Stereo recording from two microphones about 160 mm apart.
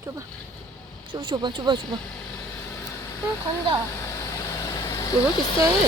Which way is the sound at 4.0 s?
20° left (ahead or behind).